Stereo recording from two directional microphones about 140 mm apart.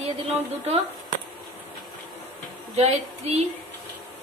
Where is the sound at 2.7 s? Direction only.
50° right (ahead or behind).